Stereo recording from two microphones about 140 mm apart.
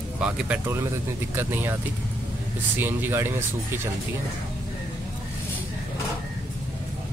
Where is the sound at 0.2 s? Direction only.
15° right (ahead or behind).